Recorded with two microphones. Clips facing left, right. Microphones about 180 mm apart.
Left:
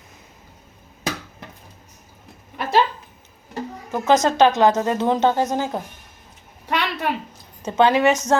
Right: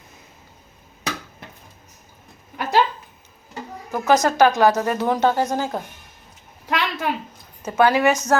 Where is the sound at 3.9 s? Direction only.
20° left (ahead or behind).